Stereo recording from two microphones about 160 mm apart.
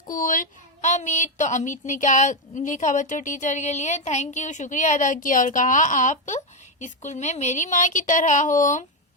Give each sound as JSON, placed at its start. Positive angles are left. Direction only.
{"t": 0.1, "sound": "speech", "side_deg": 55}